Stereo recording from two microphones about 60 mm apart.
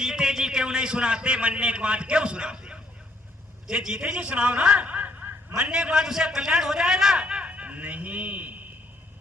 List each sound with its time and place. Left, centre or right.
0.0 s a man's voice: centre; by 5.3 s right
5.5 s a man's voice: centre